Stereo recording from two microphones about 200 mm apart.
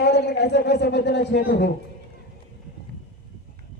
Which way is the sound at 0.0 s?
55° left (ahead or behind).